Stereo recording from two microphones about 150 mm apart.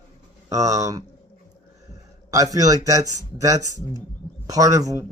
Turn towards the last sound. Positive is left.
turn(degrees=-25)  # may be behind; listen again after turning